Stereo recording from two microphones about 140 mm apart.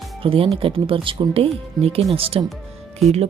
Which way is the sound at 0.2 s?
40° right (ahead or behind).